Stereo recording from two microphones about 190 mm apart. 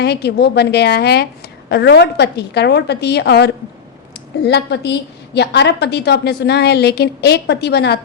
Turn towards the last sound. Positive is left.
turn(degrees=60)  # may be behind; listen again after turning